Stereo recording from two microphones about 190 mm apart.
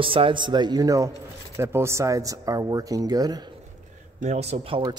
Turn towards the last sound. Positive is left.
turn(degrees=-35)  # may be behind; listen again after turning